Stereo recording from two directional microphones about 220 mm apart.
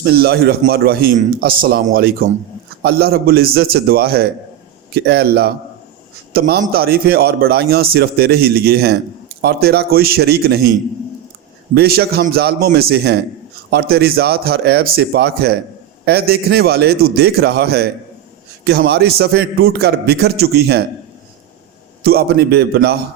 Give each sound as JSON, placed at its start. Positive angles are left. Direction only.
{"t": 0.0, "sound": "a man's voice", "side_deg": -45}
{"t": 11.7, "sound": "a man's voice", "side_deg": -45}
{"t": 22.0, "sound": "a man's voice", "side_deg": -45}